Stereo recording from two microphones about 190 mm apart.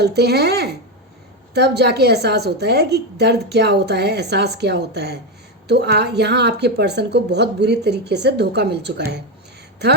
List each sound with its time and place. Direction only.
0.0 s a woman's voice: 60° right (ahead or behind)